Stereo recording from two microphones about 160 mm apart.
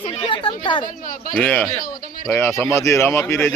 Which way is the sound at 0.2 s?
30° left (ahead or behind).